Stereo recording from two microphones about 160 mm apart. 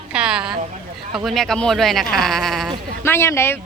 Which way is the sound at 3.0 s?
15° left (ahead or behind).